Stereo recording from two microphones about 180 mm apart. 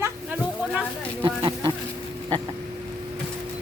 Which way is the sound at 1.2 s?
25° right (ahead or behind).